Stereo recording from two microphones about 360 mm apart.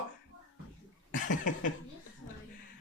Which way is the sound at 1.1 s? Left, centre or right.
Left.